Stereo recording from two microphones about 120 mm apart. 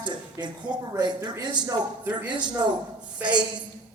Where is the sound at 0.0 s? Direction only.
40° right (ahead or behind).